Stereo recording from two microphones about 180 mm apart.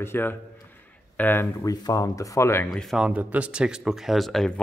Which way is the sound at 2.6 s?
Centre (ahead or behind).